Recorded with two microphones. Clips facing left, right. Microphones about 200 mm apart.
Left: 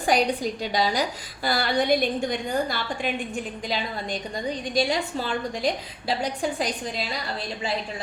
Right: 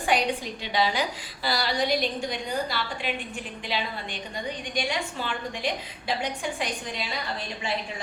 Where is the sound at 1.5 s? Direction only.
55° left (ahead or behind); by 7.1 s 35° left (ahead or behind).